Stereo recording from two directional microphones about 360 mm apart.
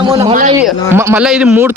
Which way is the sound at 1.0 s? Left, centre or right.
Centre.